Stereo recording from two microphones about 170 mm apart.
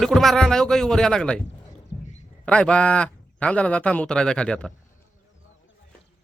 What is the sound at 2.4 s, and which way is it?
Speech, 5° left (ahead or behind).